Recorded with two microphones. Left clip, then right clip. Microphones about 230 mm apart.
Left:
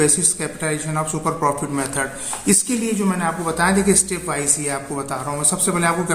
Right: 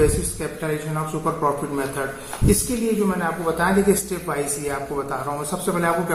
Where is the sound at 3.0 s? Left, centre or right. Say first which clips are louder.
Left 1 dB; left.